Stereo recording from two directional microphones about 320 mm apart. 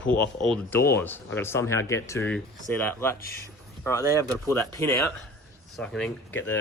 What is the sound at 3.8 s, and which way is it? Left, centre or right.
Speech, centre.